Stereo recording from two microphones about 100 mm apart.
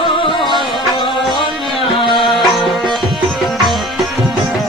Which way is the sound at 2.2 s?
Centre (ahead or behind).